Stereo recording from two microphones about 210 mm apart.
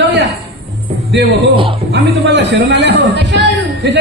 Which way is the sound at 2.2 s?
55° right (ahead or behind).